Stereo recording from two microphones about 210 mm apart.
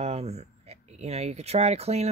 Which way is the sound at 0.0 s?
30° right (ahead or behind).